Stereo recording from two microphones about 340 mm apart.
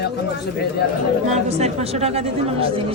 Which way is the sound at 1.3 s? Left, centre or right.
Centre.